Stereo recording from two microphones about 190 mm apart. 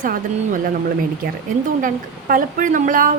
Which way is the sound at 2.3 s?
45° right (ahead or behind).